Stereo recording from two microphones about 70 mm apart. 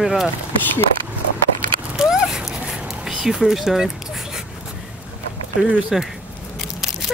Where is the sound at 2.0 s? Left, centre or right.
Centre.